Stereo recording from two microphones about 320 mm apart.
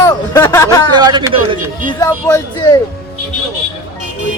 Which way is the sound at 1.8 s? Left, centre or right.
Centre.